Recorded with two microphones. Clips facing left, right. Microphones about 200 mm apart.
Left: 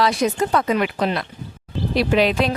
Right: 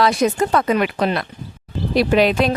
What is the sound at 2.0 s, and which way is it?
Speech, 45° right (ahead or behind).